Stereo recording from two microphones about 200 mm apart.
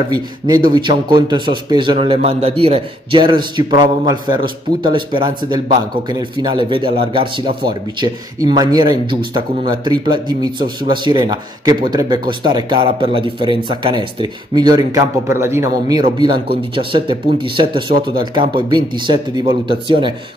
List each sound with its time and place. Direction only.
0.1 s a man's voice: 20° right (ahead or behind)